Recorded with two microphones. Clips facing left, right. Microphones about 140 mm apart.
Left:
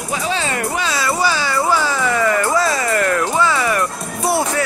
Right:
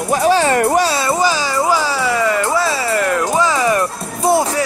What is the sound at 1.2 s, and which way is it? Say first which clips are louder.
Music: right 2 dB; 15° right (ahead or behind).